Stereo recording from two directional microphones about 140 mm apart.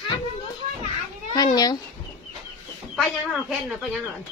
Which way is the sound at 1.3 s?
30° left (ahead or behind).